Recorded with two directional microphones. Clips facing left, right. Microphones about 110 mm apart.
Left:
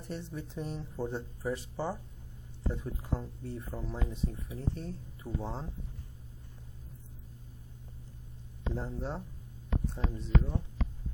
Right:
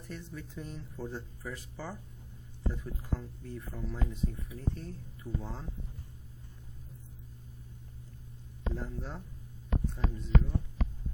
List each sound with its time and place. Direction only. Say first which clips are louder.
0.0 s speech: left 4 dB; 25° left (ahead or behind)
8.7 s speech: left 5 dB; 25° left (ahead or behind)